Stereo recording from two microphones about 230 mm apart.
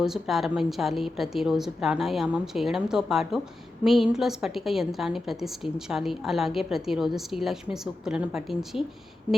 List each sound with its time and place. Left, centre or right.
0.0 s a woman's voice: centre